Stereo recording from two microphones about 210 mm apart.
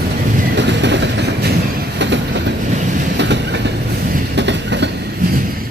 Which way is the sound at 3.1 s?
55° right (ahead or behind).